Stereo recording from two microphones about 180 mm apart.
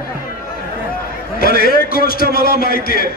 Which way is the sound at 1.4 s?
55° left (ahead or behind).